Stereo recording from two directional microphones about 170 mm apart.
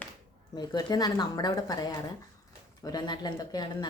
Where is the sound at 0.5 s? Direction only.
25° left (ahead or behind).